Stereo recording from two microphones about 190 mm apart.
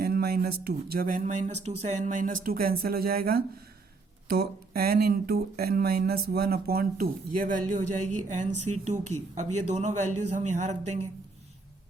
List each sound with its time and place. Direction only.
0.0 s speech: 55° right (ahead or behind); by 11.0 s 40° right (ahead or behind)